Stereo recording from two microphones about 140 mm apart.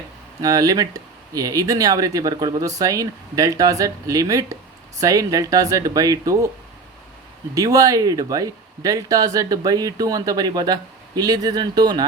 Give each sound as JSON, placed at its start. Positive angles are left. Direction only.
{"t": 0.4, "sound": "speech", "side_deg": -25}
{"t": 7.5, "sound": "speech", "side_deg": -25}